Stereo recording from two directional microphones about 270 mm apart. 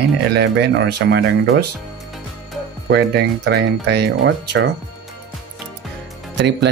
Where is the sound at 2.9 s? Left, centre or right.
Right.